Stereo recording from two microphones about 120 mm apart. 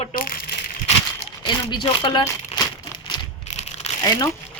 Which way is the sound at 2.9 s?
40° left (ahead or behind).